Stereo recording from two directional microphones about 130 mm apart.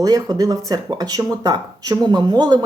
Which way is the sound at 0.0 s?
30° right (ahead or behind).